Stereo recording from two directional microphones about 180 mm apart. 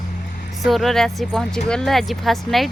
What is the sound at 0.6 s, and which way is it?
Speech, centre (ahead or behind).